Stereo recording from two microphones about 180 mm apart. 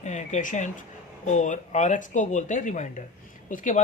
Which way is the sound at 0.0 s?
40° left (ahead or behind).